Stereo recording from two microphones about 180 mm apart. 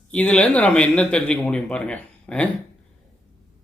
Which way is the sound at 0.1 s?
5° left (ahead or behind).